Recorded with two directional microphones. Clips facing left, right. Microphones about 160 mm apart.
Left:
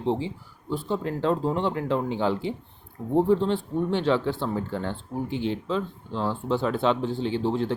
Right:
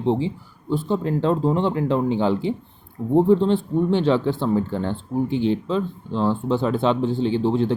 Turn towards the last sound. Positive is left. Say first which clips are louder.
# right 5 dB
turn(degrees=-25)  # may be behind; listen again after turning